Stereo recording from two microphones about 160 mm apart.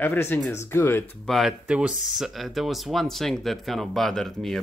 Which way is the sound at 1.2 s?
Centre (ahead or behind).